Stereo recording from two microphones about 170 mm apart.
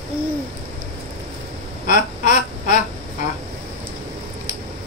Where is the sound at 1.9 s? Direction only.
50° left (ahead or behind).